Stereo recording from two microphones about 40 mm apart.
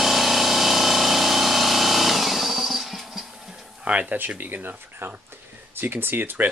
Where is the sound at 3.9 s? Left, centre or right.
Right.